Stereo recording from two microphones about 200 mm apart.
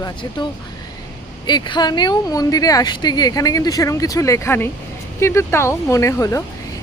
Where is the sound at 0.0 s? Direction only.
20° left (ahead or behind).